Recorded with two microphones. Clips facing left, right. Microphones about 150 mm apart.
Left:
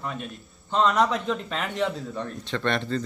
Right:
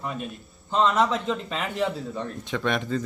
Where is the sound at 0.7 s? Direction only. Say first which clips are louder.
Even; 5° right (ahead or behind).